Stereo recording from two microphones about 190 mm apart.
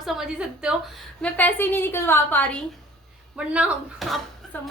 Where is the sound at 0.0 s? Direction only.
Centre (ahead or behind).